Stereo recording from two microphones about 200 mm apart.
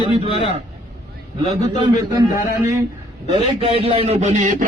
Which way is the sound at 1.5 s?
20° right (ahead or behind).